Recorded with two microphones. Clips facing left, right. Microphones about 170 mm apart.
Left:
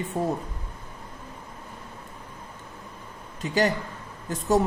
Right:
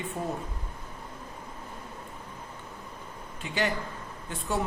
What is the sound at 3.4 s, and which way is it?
Speech, 40° left (ahead or behind).